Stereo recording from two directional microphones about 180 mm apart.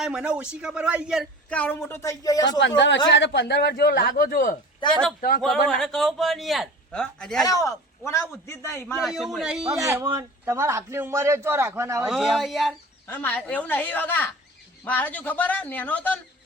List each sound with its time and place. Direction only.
0.0 s speech: 5° right (ahead or behind); by 2.6 s 20° left (ahead or behind)
2.6 s a man's voice: 80° left; by 4.5 s 50° left (ahead or behind)
4.8 s speech: 25° left (ahead or behind)
5.6 s speech: 5° left (ahead or behind)
7.4 s a man's voice: 20° left (ahead or behind)
9.0 s speech: centre (ahead or behind)
10.0 s a man's voice: 15° right (ahead or behind)
12.0 s speech: centre (ahead or behind)
13.1 s a man's voice: 10° left (ahead or behind)